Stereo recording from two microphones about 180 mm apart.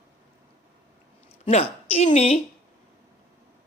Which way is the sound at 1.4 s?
35° left (ahead or behind).